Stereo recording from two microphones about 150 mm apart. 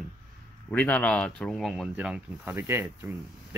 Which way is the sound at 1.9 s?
10° right (ahead or behind).